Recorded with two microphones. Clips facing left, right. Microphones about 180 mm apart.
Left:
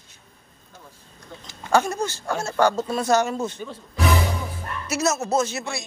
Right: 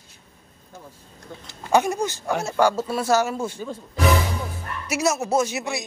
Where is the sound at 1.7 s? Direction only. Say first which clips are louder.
Right 1 dB; 15° right (ahead or behind).